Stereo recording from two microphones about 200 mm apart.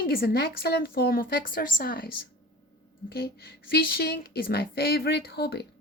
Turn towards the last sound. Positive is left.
turn(degrees=55)  # may be behind; listen again after turning